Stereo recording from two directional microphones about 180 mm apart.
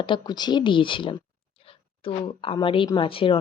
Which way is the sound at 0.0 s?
25° left (ahead or behind).